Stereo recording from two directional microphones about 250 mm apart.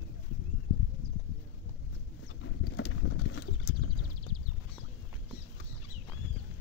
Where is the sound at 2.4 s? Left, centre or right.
Left.